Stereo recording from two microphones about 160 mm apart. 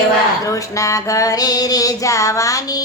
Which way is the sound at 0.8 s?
20° left (ahead or behind).